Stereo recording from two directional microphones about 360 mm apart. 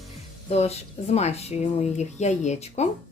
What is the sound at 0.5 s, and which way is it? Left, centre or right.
A woman's voice, centre.